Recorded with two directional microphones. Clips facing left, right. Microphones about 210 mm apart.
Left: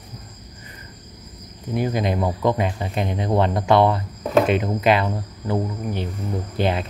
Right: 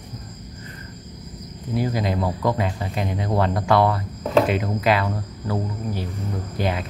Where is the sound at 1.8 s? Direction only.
20° left (ahead or behind).